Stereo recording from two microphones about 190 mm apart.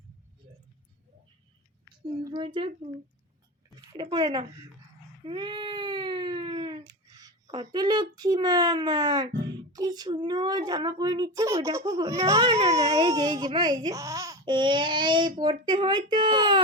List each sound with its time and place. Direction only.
2.2 s a child's voice: 25° right (ahead or behind)
5.2 s a sound: 25° right (ahead or behind)
8.1 s a child's voice: 20° right (ahead or behind)